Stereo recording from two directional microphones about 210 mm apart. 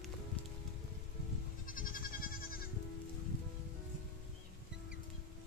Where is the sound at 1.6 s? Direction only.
40° left (ahead or behind).